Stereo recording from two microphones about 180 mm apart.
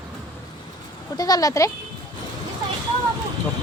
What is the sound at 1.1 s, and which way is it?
Speech, 20° left (ahead or behind).